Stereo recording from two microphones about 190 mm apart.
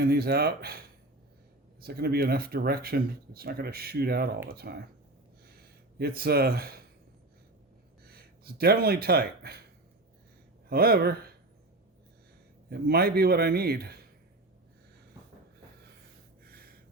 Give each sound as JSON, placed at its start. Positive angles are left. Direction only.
{"t": 0.0, "sound": "a man's voice", "side_deg": -55}
{"t": 6.0, "sound": "speech", "side_deg": -55}
{"t": 8.0, "sound": "speech", "side_deg": -55}
{"t": 10.7, "sound": "speech", "side_deg": -55}
{"t": 12.7, "sound": "a man's voice", "side_deg": -55}
{"t": 16.4, "sound": "snort", "side_deg": -50}